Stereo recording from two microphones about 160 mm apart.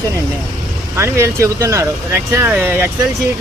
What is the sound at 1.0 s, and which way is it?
Speech, 15° right (ahead or behind).